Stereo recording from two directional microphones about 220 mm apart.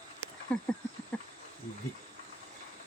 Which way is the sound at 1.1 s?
5° left (ahead or behind).